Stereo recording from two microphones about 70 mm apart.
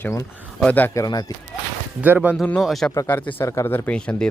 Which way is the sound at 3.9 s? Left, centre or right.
Centre.